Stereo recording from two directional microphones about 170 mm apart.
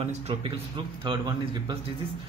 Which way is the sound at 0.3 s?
30° right (ahead or behind).